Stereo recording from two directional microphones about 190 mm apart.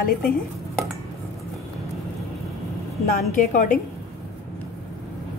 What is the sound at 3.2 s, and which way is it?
Speech, 45° left (ahead or behind).